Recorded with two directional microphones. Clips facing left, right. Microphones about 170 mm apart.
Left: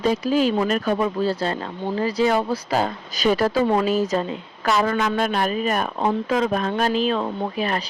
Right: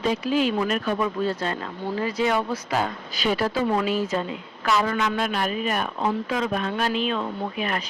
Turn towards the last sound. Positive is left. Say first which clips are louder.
# left 3 dB
turn(degrees=35)  # may be behind; listen again after turning